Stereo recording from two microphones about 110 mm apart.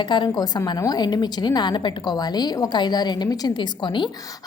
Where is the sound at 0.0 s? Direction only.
45° left (ahead or behind).